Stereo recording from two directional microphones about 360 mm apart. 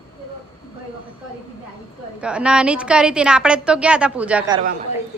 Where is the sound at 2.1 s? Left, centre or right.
Centre.